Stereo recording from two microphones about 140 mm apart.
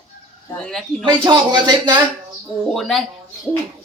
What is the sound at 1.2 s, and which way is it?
Speech, 30° right (ahead or behind).